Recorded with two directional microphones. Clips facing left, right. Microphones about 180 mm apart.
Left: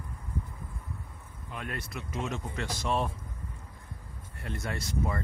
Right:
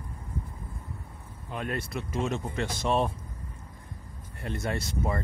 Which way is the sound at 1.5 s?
30° right (ahead or behind).